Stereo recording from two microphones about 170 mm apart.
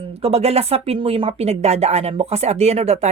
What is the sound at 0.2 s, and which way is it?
Speech, 35° right (ahead or behind).